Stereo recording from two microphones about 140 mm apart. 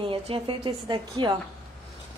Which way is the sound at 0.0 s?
40° right (ahead or behind).